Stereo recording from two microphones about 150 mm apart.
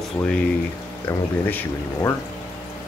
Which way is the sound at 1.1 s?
15° left (ahead or behind).